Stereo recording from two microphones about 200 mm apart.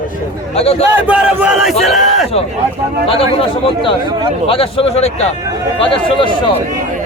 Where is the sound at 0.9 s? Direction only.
5° right (ahead or behind).